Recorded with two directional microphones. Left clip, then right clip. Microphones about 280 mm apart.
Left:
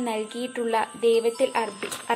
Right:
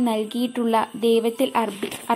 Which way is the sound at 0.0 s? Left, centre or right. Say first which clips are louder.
Right 5 dB; centre.